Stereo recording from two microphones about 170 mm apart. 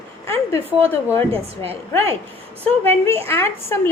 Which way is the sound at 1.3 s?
35° right (ahead or behind).